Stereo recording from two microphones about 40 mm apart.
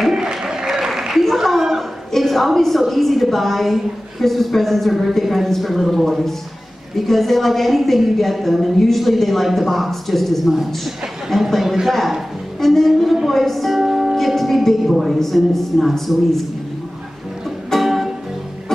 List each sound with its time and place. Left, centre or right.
0.1 s a sound: centre
2.1 s a woman's voice: centre
12.5 s speech: centre
14.1 s a woman's voice: centre
17.6 s music: centre